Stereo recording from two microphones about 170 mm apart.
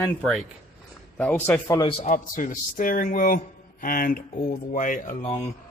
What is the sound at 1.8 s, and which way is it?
Speech, 30° left (ahead or behind).